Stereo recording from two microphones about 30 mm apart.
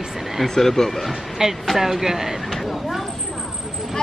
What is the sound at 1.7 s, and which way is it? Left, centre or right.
Speech, centre.